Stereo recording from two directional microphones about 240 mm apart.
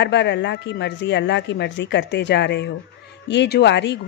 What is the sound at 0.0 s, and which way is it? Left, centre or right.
Speech, left.